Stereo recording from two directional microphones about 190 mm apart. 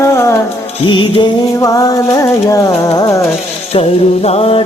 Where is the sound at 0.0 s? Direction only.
15° left (ahead or behind).